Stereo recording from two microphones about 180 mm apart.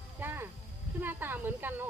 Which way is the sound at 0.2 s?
10° right (ahead or behind).